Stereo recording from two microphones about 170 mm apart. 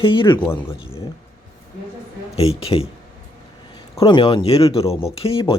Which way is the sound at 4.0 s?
25° left (ahead or behind).